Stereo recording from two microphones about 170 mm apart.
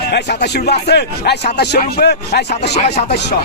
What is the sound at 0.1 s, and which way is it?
Speech, 75° left (ahead or behind).